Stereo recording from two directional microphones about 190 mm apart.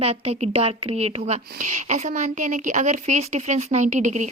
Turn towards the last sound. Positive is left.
turn(degrees=-40)  # may be behind; listen again after turning